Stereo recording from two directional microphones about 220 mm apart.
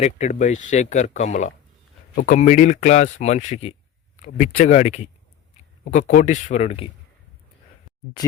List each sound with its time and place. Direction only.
0.0 s speech: 30° left (ahead or behind)